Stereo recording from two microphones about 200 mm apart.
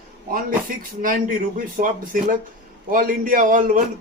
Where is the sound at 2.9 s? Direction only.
45° right (ahead or behind).